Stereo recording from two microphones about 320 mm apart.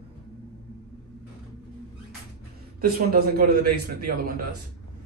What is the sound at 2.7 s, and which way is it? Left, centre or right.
A man's voice, right.